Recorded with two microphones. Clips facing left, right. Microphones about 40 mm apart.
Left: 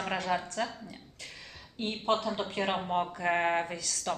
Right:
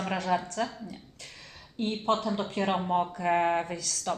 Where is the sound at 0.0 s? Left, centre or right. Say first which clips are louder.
Right 2 dB; centre.